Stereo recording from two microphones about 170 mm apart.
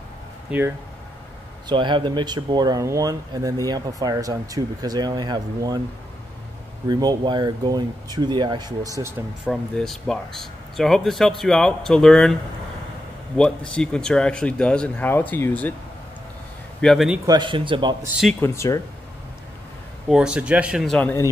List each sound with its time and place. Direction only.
0.5 s speech: 10° right (ahead or behind)
1.7 s speech: 30° right (ahead or behind)
6.9 s speech: 25° right (ahead or behind)
9.5 s speech: centre (ahead or behind)
13.4 s speech: 5° left (ahead or behind)
16.8 s speech: centre (ahead or behind)
17.3 s speech: 30° right (ahead or behind)
18.4 s speech: 15° left (ahead or behind)
20.1 s speech: 5° right (ahead or behind); by 21.3 s 10° left (ahead or behind)